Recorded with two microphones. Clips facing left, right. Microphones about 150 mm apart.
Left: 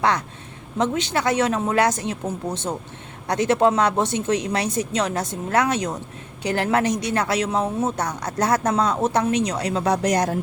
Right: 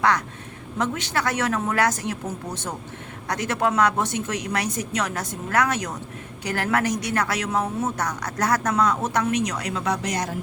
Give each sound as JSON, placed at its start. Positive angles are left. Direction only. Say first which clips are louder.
{"t": 0.8, "sound": "a woman's voice", "louder": "left 3 dB", "side_deg": 20}